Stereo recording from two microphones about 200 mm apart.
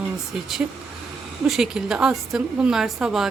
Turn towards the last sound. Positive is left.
turn(degrees=0)  # may be behind; listen again after turning